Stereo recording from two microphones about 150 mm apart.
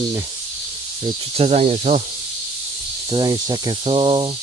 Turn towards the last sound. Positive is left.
turn(degrees=-35)  # may be behind; listen again after turning